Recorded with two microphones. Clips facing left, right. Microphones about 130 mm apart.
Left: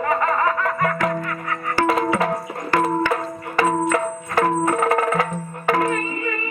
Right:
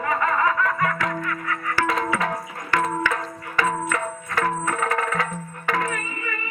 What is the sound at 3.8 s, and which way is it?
Music, 30° left (ahead or behind).